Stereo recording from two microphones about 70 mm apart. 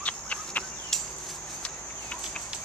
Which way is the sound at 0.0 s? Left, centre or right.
Centre.